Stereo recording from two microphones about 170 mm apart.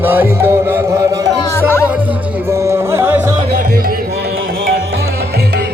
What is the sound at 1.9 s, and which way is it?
Music, 10° right (ahead or behind).